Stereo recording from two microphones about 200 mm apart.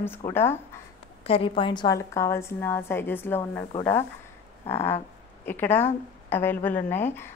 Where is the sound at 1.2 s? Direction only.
30° left (ahead or behind); by 3.6 s 10° left (ahead or behind).